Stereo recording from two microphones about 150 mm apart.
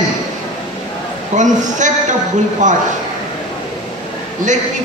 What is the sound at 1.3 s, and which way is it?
Speech, 55° right (ahead or behind).